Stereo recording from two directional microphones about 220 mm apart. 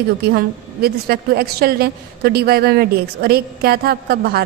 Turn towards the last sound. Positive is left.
turn(degrees=-45)  # may be behind; listen again after turning